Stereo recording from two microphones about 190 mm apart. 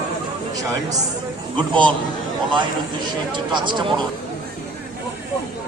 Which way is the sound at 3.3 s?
25° right (ahead or behind).